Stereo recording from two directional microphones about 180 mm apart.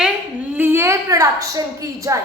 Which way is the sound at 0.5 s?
10° right (ahead or behind).